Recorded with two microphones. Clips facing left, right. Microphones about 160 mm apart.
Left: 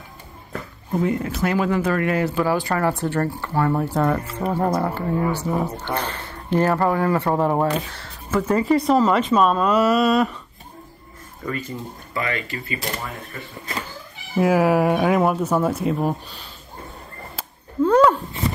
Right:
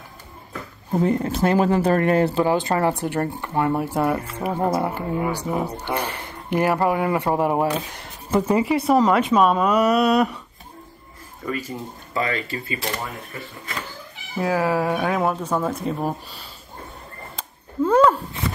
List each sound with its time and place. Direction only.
1.0 s speech: 35° right (ahead or behind); by 9.8 s 10° right (ahead or behind)
9.9 s speech: centre (ahead or behind)
11.4 s speech: 10° right (ahead or behind)
12.1 s speech: 30° right (ahead or behind)
14.4 s speech: 15° left (ahead or behind)
17.8 s a sound: 5° right (ahead or behind)